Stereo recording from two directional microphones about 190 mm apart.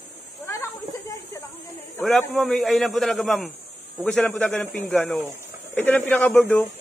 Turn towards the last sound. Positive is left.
turn(degrees=5)  # may be behind; listen again after turning